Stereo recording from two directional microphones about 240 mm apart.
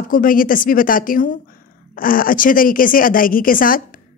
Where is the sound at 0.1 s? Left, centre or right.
Left.